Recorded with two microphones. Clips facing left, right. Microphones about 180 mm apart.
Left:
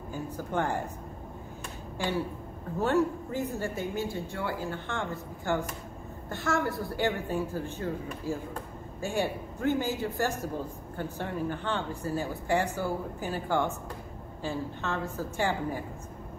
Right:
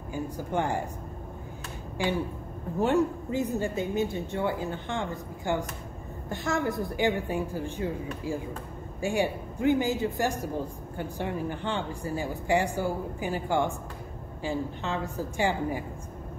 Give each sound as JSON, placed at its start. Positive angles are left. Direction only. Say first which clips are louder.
{"t": 0.1, "sound": "speech", "louder": "right 2 dB", "side_deg": -15}
{"t": 2.8, "sound": "speech", "louder": "right 2 dB", "side_deg": -15}